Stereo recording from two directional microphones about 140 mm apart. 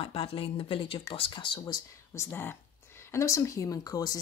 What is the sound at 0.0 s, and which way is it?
Speech, 40° left (ahead or behind).